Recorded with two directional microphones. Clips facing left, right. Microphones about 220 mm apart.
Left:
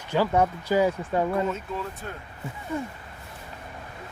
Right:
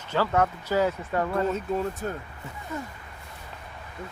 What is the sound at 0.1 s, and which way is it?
Speech, 10° left (ahead or behind).